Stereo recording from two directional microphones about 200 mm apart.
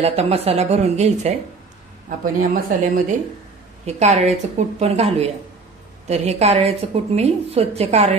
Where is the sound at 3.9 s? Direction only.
35° right (ahead or behind).